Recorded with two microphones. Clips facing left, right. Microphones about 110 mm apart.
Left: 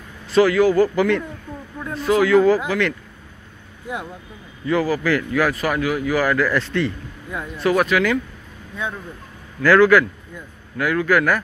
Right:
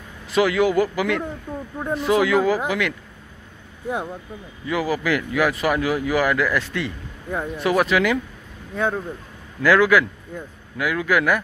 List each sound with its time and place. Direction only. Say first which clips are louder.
0.3 s speech: left 3 dB; 15° right (ahead or behind)
0.8 s speech: left 4 dB; 5° right (ahead or behind)
2.0 s speech: left 3 dB; 15° right (ahead or behind)
4.6 s speech: left 3 dB; 15° right (ahead or behind)
8.7 s speech: right 6 dB; 50° right (ahead or behind)
9.6 s speech: left 3 dB; 10° right (ahead or behind)